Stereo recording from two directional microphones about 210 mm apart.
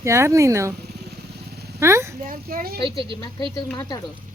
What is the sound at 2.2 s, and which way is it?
Speech, 45° right (ahead or behind).